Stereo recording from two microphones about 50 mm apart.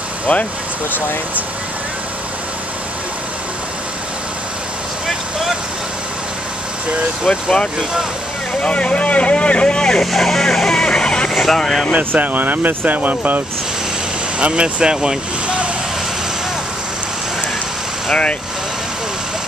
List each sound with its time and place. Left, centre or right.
0.3 s speech: left
5.0 s vehicle: centre
7.3 s speech: centre
8.6 s speech: left
10.1 s vehicle: centre
11.3 s speech: centre
12.0 s speech: right
14.4 s speech: right